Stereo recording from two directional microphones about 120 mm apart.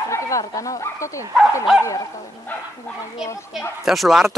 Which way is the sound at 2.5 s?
15° left (ahead or behind).